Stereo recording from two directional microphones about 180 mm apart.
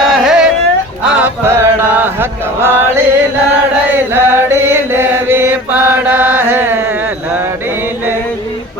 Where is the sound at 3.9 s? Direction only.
10° right (ahead or behind).